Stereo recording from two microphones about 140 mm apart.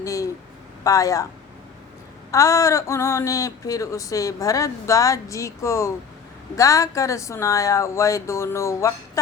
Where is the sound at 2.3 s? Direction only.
20° left (ahead or behind).